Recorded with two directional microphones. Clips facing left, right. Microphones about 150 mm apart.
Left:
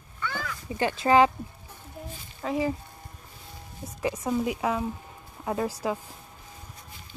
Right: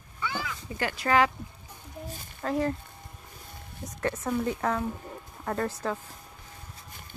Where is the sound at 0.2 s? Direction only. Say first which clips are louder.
Even; 10° right (ahead or behind).